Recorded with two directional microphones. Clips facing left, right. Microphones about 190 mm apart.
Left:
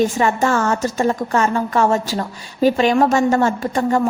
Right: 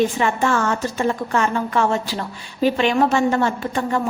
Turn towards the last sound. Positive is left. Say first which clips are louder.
# left 4 dB
turn(degrees=45)  # may be behind; listen again after turning